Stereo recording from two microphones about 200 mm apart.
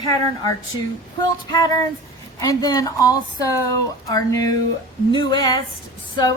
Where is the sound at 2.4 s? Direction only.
15° left (ahead or behind).